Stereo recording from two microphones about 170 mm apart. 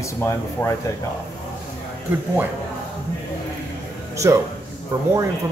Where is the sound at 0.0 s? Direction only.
15° left (ahead or behind).